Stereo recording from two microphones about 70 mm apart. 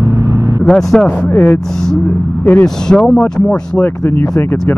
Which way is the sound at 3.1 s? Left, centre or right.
Centre.